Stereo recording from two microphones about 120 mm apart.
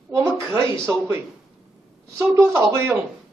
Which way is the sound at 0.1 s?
25° right (ahead or behind).